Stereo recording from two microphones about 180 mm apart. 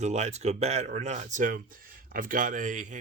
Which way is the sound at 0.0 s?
40° right (ahead or behind).